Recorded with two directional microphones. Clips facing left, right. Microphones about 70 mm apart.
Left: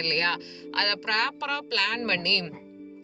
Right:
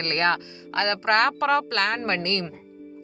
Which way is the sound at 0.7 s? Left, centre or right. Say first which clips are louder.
Right 4 dB; right.